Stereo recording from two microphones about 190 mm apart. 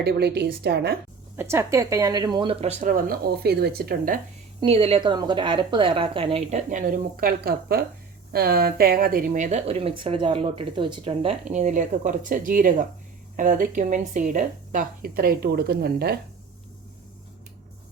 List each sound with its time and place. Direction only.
0.0 s a woman's voice: 55° right (ahead or behind)
1.4 s a woman's voice: 15° right (ahead or behind); by 4.2 s 50° right (ahead or behind)
4.6 s a woman's voice: 30° right (ahead or behind); by 16.1 s 55° right (ahead or behind)